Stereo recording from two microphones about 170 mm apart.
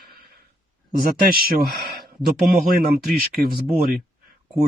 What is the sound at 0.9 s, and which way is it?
Speech, 60° right (ahead or behind).